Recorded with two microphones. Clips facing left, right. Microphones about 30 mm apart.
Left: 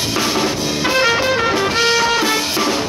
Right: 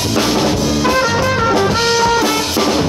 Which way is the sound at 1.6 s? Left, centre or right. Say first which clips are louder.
Right 2 dB; centre.